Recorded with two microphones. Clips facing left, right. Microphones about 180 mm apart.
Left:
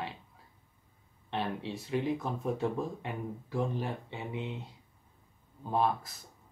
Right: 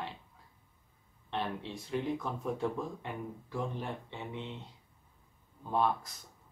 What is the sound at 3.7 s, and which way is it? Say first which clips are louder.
Speech: left 3 dB; 5° left (ahead or behind).